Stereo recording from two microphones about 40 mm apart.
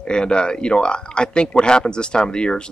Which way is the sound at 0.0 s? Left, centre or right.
Left.